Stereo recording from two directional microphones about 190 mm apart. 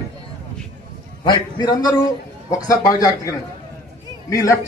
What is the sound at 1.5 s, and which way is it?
A man's voice, 20° left (ahead or behind).